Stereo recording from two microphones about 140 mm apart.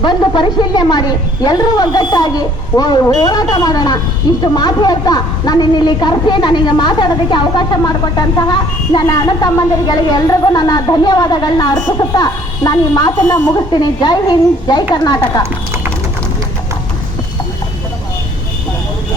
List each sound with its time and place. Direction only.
0.0 s a woman's voice: 35° left (ahead or behind)